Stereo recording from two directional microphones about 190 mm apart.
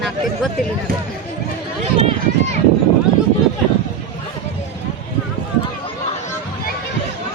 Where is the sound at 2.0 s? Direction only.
35° right (ahead or behind).